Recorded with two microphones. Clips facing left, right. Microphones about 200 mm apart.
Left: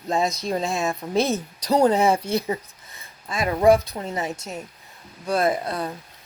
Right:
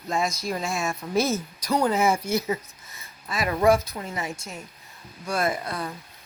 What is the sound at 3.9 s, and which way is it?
Speech, 35° left (ahead or behind).